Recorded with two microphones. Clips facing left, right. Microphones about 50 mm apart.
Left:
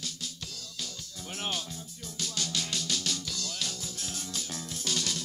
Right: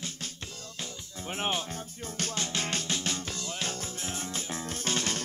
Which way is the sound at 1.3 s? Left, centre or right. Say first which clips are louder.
Right 4 dB; right.